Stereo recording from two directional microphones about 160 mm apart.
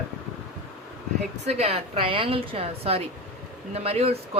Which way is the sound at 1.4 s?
40° right (ahead or behind).